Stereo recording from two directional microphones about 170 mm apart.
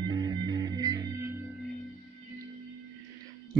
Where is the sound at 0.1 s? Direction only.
25° right (ahead or behind).